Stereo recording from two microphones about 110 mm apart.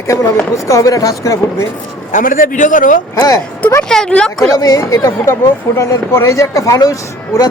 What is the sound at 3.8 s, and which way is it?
Speech, 5° left (ahead or behind).